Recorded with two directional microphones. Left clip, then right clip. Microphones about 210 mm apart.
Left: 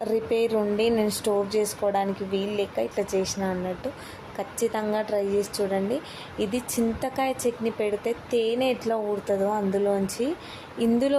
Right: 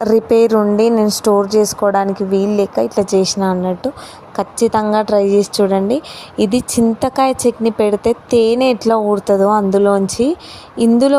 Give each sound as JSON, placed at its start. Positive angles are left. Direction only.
{"t": 0.0, "sound": "a woman's voice", "side_deg": -35}